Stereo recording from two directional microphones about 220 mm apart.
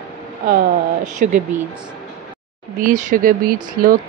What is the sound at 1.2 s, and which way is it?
Speech, 35° right (ahead or behind).